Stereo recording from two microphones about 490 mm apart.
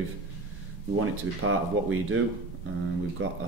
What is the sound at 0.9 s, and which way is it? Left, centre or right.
Speech, right.